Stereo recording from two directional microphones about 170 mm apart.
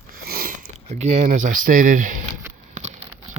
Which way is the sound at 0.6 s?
40° right (ahead or behind).